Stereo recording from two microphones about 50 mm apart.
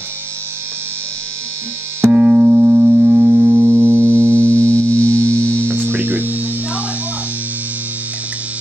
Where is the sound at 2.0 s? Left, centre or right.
Right.